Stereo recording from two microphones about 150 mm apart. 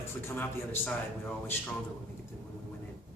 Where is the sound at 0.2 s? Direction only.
15° left (ahead or behind).